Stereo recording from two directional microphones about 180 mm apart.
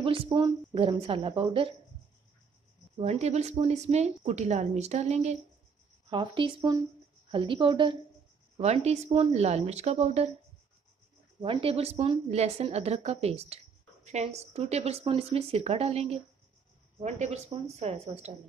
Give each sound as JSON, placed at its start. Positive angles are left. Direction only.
{"t": 0.0, "sound": "a woman's voice", "side_deg": -30}
{"t": 3.0, "sound": "a woman's voice", "side_deg": -35}
{"t": 6.0, "sound": "a woman's voice", "side_deg": -25}
{"t": 11.4, "sound": "a woman's voice", "side_deg": -30}